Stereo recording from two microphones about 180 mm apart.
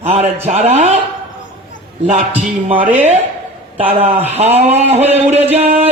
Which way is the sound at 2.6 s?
30° right (ahead or behind).